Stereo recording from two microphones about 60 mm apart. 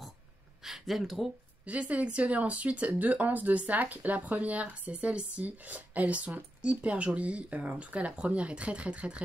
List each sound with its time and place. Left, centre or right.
0.7 s speech: centre
1.7 s speech: right